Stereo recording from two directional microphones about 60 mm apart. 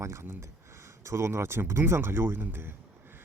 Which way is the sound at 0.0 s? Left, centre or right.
Right.